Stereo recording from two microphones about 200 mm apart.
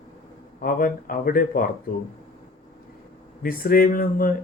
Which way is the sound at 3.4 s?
45° left (ahead or behind).